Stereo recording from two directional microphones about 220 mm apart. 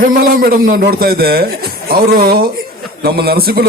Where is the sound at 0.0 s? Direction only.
40° right (ahead or behind).